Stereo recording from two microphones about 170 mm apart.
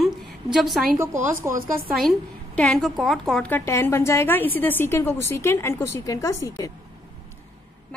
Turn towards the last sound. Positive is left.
turn(degrees=20)  # may be behind; listen again after turning